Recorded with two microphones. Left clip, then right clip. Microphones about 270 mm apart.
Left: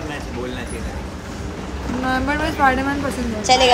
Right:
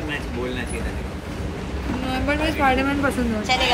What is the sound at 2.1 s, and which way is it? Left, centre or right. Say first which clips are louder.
A woman's voice: left 2 dB; centre.